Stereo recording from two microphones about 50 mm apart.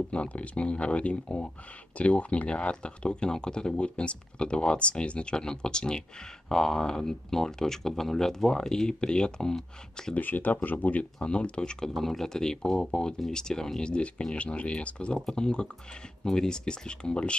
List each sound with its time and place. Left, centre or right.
0.1 s speech: left
10.1 s speech: left
11.1 s speech: centre
11.9 s speech: centre